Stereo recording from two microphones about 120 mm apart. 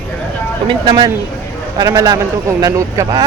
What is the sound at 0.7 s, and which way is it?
Speech, 40° right (ahead or behind).